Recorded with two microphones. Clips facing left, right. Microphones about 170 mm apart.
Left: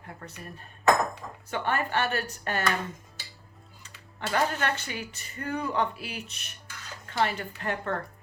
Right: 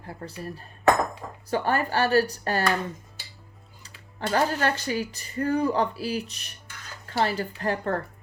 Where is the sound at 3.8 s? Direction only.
35° right (ahead or behind).